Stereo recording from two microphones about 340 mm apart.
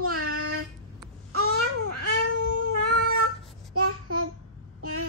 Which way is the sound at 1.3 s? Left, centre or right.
Right.